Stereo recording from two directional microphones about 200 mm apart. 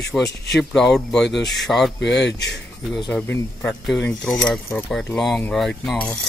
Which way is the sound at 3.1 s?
5° left (ahead or behind).